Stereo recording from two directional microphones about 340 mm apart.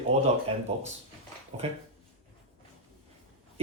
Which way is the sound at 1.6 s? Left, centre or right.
Centre.